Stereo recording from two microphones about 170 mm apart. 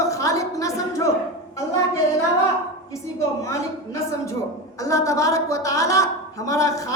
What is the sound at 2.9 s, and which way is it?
A woman's voice, 20° left (ahead or behind).